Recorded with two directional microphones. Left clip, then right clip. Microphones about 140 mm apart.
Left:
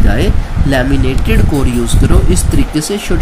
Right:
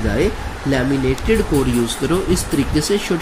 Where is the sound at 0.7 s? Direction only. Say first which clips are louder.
Left 4 dB; 50° left (ahead or behind).